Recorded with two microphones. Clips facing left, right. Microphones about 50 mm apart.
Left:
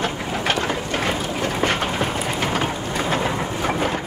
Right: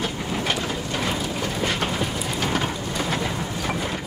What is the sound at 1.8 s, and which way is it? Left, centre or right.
Train, left.